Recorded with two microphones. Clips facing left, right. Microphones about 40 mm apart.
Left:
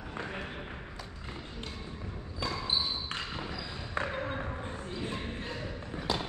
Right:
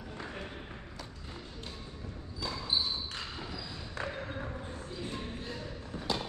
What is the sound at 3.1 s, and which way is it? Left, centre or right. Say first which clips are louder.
Basketball bounce: left 4 dB; left.